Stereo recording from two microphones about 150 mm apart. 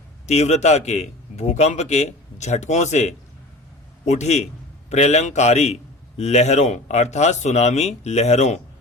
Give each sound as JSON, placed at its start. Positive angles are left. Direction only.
{"t": 0.3, "sound": "a man's voice", "side_deg": 45}